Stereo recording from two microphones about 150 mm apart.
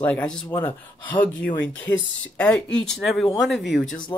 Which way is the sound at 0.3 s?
10° left (ahead or behind).